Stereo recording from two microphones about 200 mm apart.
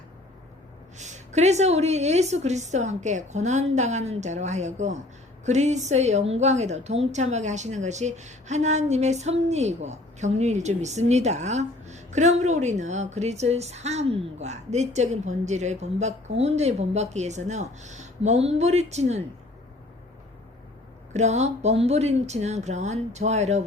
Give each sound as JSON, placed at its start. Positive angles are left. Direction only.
{"t": 0.9, "sound": "a woman's voice", "side_deg": -35}
{"t": 21.1, "sound": "a woman's voice", "side_deg": -35}